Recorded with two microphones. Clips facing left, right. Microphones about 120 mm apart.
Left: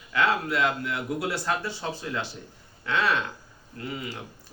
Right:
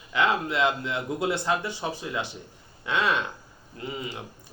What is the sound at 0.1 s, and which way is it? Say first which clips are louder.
A man's voice: even; 20° right (ahead or behind).